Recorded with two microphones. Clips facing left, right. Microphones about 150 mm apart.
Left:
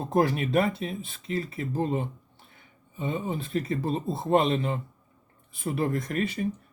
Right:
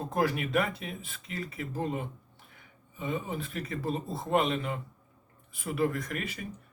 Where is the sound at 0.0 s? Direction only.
30° left (ahead or behind).